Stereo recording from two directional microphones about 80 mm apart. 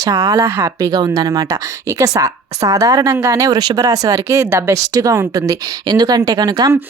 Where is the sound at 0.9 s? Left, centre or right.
Right.